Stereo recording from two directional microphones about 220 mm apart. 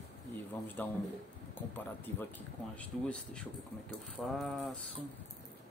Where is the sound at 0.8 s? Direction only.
5° left (ahead or behind).